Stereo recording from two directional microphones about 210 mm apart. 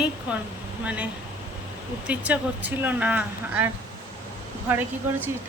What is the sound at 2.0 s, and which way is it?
Speech, 5° right (ahead or behind).